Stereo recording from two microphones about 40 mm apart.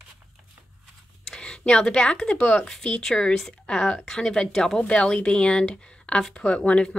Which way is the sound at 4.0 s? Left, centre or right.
Centre.